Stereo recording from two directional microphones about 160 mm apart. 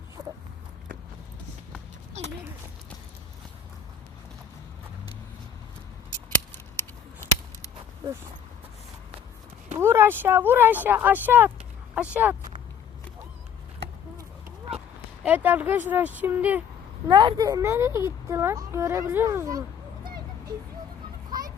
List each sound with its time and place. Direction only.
0.2 s dog: 20° right (ahead or behind)
6.7 s a sound: 15° left (ahead or behind)
9.7 s speech: 15° right (ahead or behind)
15.2 s speech: 10° right (ahead or behind)
17.1 s speech: 30° right (ahead or behind)
21.2 s children playing: 25° right (ahead or behind)